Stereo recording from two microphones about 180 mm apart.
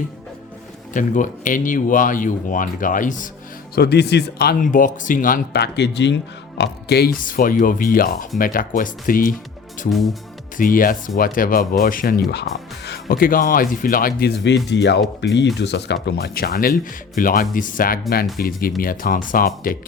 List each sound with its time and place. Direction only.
0.9 s speech: 45° left (ahead or behind)
3.8 s speech: 65° left (ahead or behind); by 9.3 s 50° left (ahead or behind)
9.9 s music: centre (ahead or behind)
10.6 s speech: 50° left (ahead or behind)
12.3 s speech: 70° left (ahead or behind); by 19.7 s 50° left (ahead or behind)